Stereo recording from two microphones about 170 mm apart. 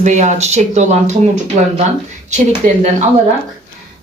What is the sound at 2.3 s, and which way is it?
Speech, 45° right (ahead or behind).